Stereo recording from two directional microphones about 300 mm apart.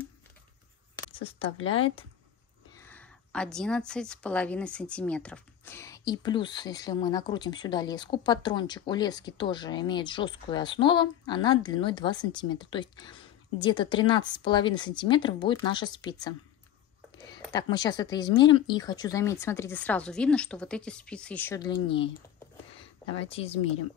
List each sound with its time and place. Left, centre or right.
0.9 s speech: centre
2.8 s a woman's voice: centre